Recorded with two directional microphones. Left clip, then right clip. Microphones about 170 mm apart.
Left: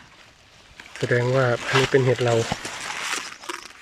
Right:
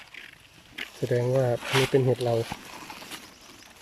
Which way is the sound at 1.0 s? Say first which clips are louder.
Left 4 dB; 15° right (ahead or behind).